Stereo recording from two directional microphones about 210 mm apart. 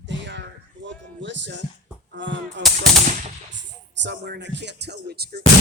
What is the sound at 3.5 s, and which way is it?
Speech, 55° right (ahead or behind).